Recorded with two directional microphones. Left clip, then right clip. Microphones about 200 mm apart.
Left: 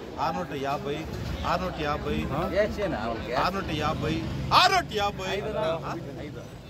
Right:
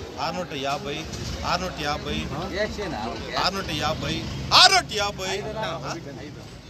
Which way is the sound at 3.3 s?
5° left (ahead or behind).